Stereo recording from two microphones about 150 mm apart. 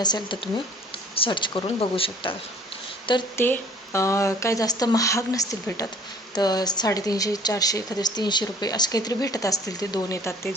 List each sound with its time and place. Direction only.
0.0 s speech: 30° left (ahead or behind)
3.3 s speech: 15° left (ahead or behind)